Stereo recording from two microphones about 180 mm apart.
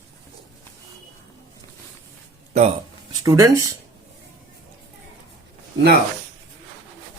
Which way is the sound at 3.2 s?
15° right (ahead or behind).